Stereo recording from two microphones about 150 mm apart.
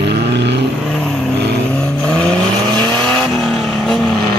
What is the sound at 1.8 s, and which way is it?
Vehicle, 5° left (ahead or behind).